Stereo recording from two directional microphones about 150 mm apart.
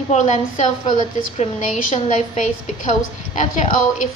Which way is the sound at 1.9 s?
45° left (ahead or behind).